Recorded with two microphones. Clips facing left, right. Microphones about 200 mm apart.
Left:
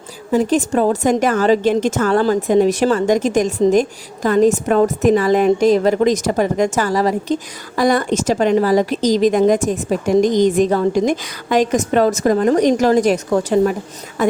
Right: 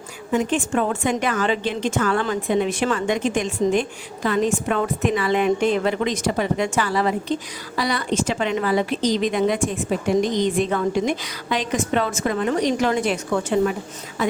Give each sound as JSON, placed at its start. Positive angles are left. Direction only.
{"t": 0.3, "sound": "a woman's voice", "side_deg": 35}